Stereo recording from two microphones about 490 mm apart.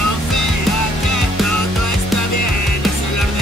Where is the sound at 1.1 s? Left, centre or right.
Left.